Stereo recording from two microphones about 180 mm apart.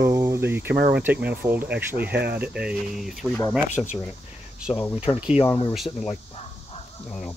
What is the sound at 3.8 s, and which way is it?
Speech, 10° left (ahead or behind).